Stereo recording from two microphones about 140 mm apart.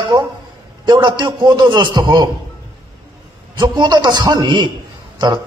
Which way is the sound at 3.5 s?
30° right (ahead or behind).